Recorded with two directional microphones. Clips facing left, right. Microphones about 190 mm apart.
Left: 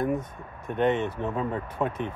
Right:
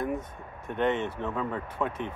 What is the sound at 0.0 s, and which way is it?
Speech, 15° left (ahead or behind).